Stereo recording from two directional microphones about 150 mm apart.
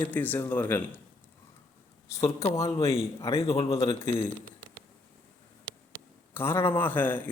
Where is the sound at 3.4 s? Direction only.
40° left (ahead or behind).